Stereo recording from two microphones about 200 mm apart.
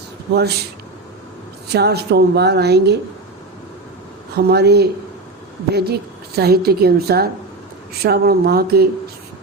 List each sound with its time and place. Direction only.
1.6 s a woman's voice: 55° right (ahead or behind)
4.4 s a woman's voice: 50° right (ahead or behind)